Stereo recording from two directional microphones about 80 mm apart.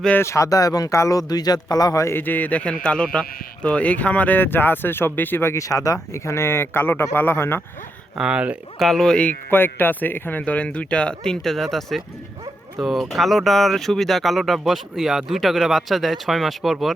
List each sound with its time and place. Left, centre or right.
0.2 s speech: left
2.1 s speech: left
8.2 s speech: centre
8.8 s speech: centre
9.1 s speech: left; by 16.9 s centre